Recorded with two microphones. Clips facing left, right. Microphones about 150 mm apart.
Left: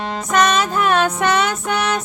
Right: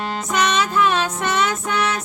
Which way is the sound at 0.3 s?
45° left (ahead or behind).